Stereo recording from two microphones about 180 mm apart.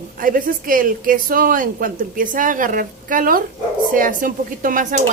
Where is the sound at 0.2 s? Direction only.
50° right (ahead or behind).